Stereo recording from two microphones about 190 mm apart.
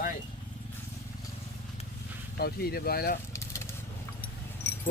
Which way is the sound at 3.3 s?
15° left (ahead or behind).